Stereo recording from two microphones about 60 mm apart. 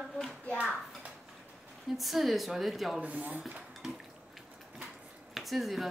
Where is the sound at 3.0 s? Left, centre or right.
Right.